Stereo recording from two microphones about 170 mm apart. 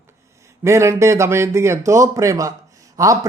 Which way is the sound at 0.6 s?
15° right (ahead or behind).